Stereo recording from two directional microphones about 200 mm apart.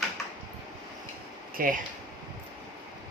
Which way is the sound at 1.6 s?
45° right (ahead or behind).